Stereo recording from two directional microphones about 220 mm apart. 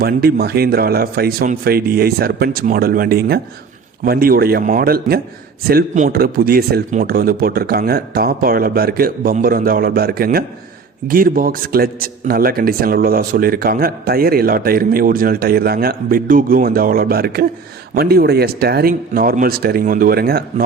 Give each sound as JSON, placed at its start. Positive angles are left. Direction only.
{"t": 0.0, "sound": "a man's voice", "side_deg": -45}